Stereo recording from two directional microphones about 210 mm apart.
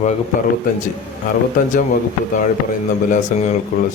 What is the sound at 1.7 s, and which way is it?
Speech, 40° left (ahead or behind).